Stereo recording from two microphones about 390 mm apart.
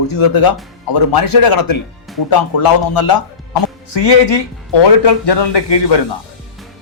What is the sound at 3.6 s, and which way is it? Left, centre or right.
A man's voice, left.